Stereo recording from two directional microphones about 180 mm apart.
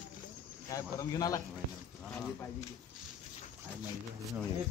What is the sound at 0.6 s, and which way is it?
Speech, 20° left (ahead or behind).